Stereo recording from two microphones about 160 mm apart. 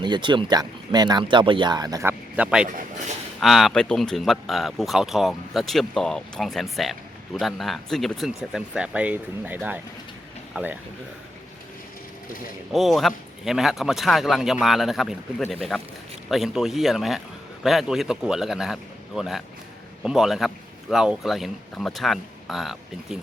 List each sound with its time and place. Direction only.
0.0 s speech: 30° right (ahead or behind)
2.3 s speech: 5° right (ahead or behind)
12.7 s speech: centre (ahead or behind)